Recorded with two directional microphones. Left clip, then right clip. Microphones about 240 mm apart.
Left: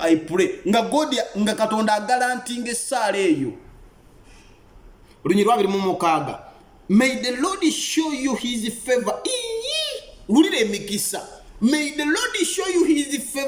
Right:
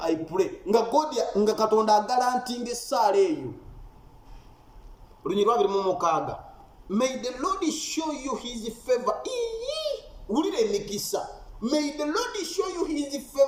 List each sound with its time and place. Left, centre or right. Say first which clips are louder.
0.0 s a man's voice: left 7 dB; centre
5.2 s a man's voice: left 4 dB; centre